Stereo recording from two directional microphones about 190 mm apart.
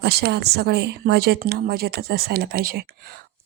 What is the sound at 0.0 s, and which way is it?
Speech, 60° right (ahead or behind).